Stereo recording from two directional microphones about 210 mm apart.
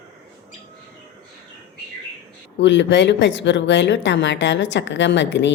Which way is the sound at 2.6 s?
60° left (ahead or behind).